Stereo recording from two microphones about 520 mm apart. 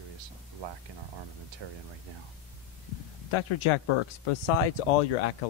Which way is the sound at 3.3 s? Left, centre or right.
Left.